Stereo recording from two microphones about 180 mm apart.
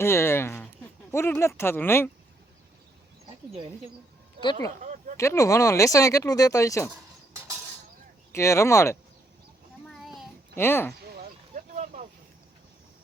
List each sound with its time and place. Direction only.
0.0 s a sound: 15° left (ahead or behind)
1.1 s speech: 15° left (ahead or behind)
4.8 s a sound: 45° right (ahead or behind)
5.1 s speech: 15° left (ahead or behind)
8.3 s speech: 15° left (ahead or behind)
9.9 s child singing: centre (ahead or behind)
10.5 s speech: 10° left (ahead or behind)
11.5 s vehicle: 45° right (ahead or behind)